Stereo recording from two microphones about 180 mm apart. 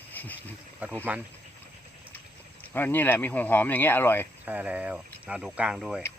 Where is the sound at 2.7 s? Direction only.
10° left (ahead or behind).